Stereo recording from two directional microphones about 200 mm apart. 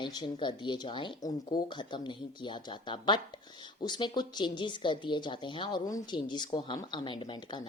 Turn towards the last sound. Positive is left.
turn(degrees=20)  # may be behind; listen again after turning